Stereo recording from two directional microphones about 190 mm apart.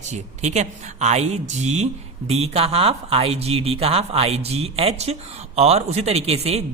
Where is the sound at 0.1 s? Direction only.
35° right (ahead or behind).